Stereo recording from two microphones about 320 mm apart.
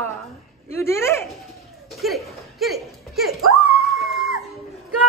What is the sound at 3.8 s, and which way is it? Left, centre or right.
Dog, centre.